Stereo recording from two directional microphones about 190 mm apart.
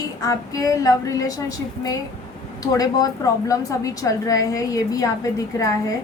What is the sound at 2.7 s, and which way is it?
A woman's voice, 20° left (ahead or behind).